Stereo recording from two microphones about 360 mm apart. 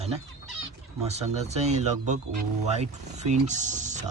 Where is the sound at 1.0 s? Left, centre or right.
Centre.